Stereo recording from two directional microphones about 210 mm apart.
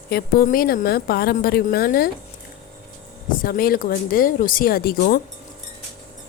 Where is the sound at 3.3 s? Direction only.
45° left (ahead or behind).